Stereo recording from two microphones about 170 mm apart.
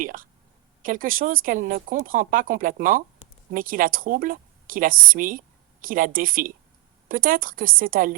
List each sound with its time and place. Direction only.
0.0 s speech: 55° right (ahead or behind)